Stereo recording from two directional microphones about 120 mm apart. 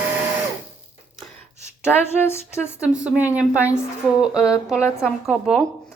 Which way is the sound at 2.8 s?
10° right (ahead or behind).